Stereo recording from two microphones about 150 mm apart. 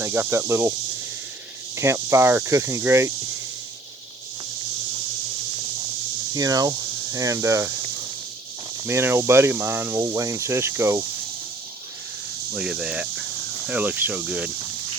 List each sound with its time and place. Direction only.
0.0 s speech: 15° right (ahead or behind)
1.7 s speech: 20° right (ahead or behind)
6.3 s speech: 25° right (ahead or behind)
8.9 s speech: 15° right (ahead or behind)
12.5 s speech: 5° right (ahead or behind)